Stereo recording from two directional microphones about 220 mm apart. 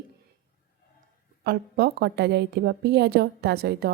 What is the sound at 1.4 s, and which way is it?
A woman's voice, 45° right (ahead or behind).